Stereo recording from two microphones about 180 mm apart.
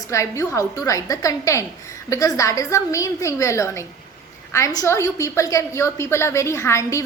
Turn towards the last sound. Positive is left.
turn(degrees=15)  # may be behind; listen again after turning